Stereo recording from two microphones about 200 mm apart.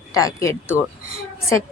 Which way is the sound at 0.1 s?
15° left (ahead or behind).